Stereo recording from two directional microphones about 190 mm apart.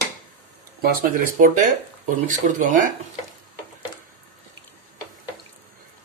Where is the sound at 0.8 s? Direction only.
45° right (ahead or behind).